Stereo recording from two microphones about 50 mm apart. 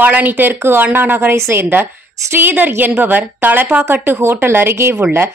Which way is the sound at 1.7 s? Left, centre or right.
Right.